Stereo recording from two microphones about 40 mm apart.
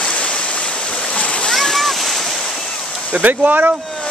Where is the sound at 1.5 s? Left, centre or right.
Centre.